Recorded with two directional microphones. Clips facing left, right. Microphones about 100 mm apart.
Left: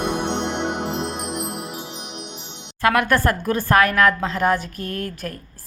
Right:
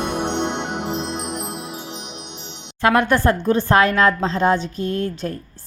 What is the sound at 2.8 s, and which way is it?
A woman's voice, 25° right (ahead or behind).